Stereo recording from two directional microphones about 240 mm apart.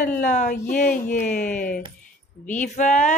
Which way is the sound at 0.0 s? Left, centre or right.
Left.